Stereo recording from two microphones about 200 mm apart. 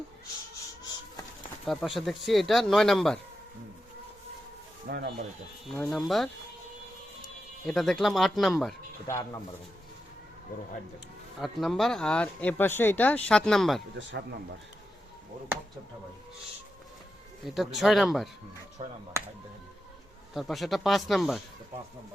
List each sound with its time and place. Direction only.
1.6 s speech: centre (ahead or behind)
4.9 s speech: 55° right (ahead or behind)
5.6 s speech: 5° left (ahead or behind)
7.6 s speech: centre (ahead or behind)
11.3 s speech: centre (ahead or behind)
17.4 s speech: centre (ahead or behind)
18.8 s speech: 30° right (ahead or behind)
20.3 s speech: centre (ahead or behind)